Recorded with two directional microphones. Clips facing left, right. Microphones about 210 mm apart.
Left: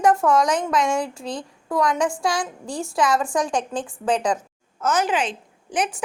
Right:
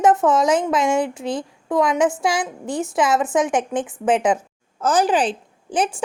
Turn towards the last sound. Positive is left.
turn(degrees=-30)  # may be behind; listen again after turning